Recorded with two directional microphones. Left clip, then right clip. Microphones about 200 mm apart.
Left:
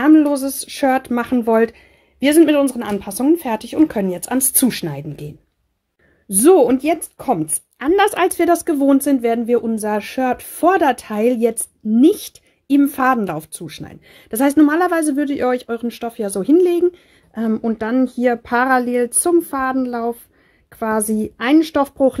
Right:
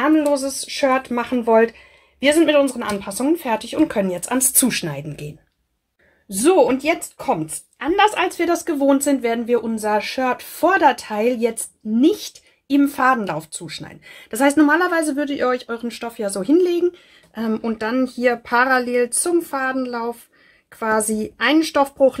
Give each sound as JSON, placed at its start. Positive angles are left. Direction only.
{"t": 0.0, "sound": "speech", "side_deg": 45}
{"t": 6.2, "sound": "speech", "side_deg": 45}